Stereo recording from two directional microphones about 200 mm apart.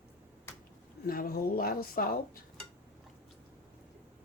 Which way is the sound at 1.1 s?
45° left (ahead or behind).